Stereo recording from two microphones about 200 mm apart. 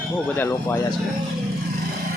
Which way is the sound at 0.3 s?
10° left (ahead or behind).